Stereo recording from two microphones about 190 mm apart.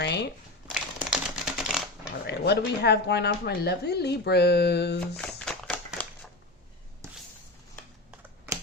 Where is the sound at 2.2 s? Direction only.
60° left (ahead or behind).